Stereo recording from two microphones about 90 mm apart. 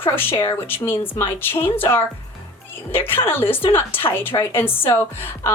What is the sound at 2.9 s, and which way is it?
A woman's voice, 25° left (ahead or behind).